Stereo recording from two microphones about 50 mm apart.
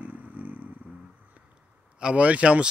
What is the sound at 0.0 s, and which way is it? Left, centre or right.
Vehicle, right.